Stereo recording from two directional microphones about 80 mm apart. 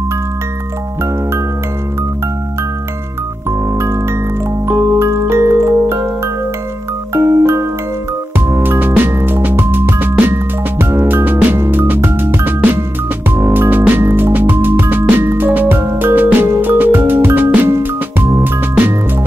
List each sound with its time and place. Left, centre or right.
3.7 s music: right
7.2 s music: right